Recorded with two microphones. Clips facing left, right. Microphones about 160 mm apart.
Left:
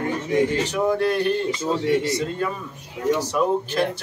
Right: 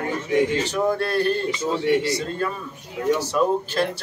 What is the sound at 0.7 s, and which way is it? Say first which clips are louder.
A man's voice: left 1 dB; 15° left (ahead or behind).